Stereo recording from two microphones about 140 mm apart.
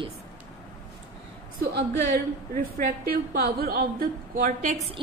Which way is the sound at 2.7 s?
90° right.